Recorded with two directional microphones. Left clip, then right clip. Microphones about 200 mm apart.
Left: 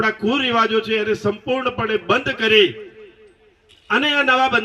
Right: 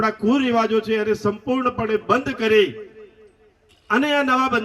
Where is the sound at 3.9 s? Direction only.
40° left (ahead or behind).